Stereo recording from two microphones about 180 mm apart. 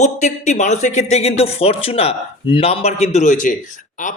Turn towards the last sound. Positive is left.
turn(degrees=45)  # may be behind; listen again after turning